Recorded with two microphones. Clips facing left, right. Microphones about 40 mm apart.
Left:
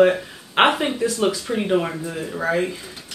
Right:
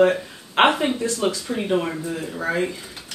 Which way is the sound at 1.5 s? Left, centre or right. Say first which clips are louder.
Left 2 dB; centre.